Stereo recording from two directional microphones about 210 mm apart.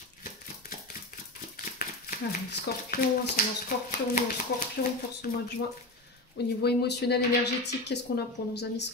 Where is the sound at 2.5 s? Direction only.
45° left (ahead or behind).